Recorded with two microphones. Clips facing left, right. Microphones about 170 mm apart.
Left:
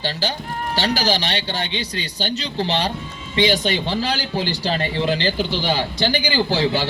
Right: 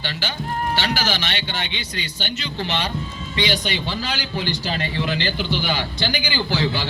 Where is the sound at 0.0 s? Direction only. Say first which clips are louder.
Left 4 dB; 35° left (ahead or behind).